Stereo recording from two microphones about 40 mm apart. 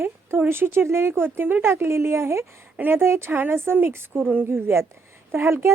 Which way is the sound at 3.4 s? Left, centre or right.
Right.